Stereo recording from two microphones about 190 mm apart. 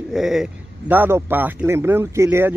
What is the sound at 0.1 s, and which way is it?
Speech, centre (ahead or behind).